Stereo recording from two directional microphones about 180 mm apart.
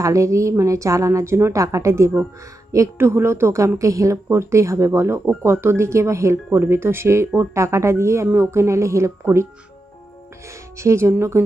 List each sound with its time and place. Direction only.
0.0 s a woman's voice: 15° right (ahead or behind)